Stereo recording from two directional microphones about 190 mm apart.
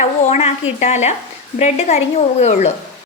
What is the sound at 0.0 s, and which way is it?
A woman's voice, 35° left (ahead or behind).